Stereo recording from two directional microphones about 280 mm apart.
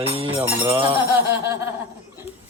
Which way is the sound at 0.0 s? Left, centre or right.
Centre.